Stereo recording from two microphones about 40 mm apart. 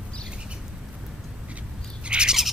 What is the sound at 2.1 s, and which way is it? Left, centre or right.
Bird, right.